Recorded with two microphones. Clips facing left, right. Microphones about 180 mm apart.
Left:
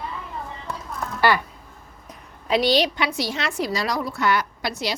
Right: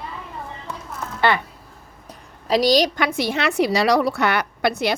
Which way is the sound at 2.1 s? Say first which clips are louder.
Right 2 dB; 35° right (ahead or behind).